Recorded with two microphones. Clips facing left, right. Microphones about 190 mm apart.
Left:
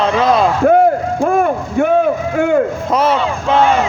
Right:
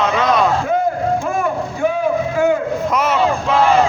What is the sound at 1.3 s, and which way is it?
Vehicle, 60° left (ahead or behind).